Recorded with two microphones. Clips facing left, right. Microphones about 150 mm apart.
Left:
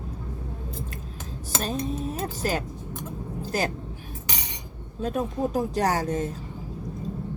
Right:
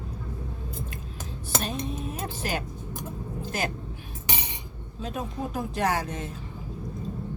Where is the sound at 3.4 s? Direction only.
35° left (ahead or behind).